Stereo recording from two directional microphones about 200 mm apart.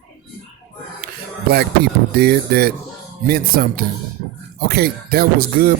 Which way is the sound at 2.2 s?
50° right (ahead or behind).